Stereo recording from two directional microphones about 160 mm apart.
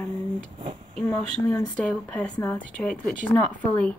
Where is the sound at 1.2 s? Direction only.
10° left (ahead or behind).